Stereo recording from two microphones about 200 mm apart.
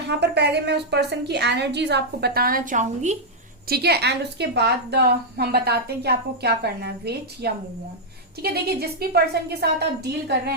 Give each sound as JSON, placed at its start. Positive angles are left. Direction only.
{"t": 0.1, "sound": "a woman's voice", "side_deg": -55}
{"t": 3.7, "sound": "a woman's voice", "side_deg": -55}